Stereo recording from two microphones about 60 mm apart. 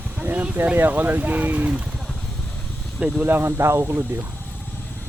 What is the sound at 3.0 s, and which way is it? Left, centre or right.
Speech, right.